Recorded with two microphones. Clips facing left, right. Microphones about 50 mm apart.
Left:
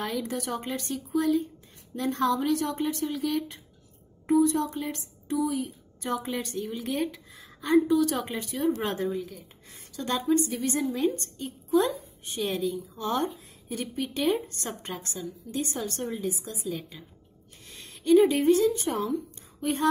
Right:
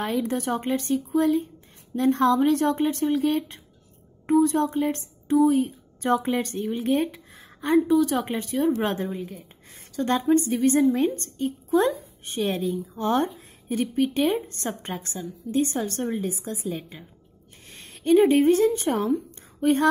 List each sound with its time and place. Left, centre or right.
0.0 s a woman's voice: right